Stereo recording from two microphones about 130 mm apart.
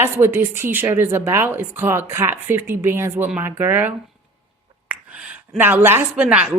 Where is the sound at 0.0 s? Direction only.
15° right (ahead or behind).